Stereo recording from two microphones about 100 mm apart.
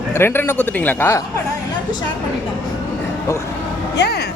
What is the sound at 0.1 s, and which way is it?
A man's voice, 25° left (ahead or behind).